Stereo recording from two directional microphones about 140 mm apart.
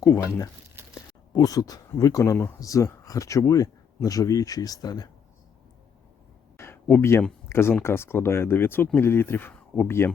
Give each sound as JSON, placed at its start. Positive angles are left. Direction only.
{"t": 0.9, "sound": "speech", "side_deg": 30}
{"t": 6.6, "sound": "a sound", "side_deg": 15}
{"t": 7.5, "sound": "speech", "side_deg": 15}